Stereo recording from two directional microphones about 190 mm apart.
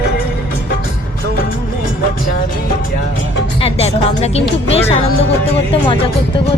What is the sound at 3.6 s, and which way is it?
Music, 35° left (ahead or behind).